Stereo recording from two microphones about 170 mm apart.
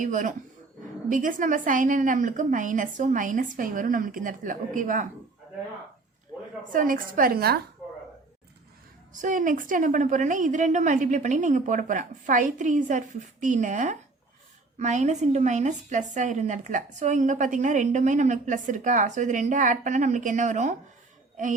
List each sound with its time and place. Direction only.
0.0 s a woman's voice: 50° right (ahead or behind)
6.7 s a woman's voice: 55° right (ahead or behind)
9.2 s a woman's voice: 50° right (ahead or behind)